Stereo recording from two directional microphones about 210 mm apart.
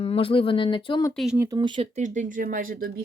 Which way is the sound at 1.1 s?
Centre (ahead or behind).